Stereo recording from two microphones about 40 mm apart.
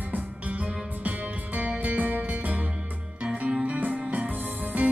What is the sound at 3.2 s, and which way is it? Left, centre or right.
Music, right.